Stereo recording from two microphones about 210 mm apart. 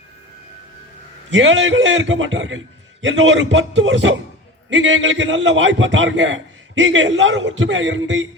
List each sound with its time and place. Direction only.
1.3 s a man's voice: 65° right (ahead or behind)